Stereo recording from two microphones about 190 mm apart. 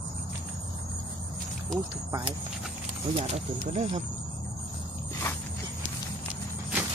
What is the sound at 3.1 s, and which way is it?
Speech, 35° right (ahead or behind).